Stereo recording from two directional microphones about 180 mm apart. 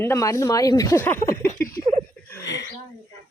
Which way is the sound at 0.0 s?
15° left (ahead or behind).